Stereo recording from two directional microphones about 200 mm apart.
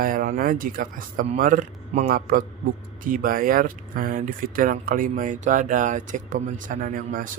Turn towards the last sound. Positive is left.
turn(degrees=-40)  # may be behind; listen again after turning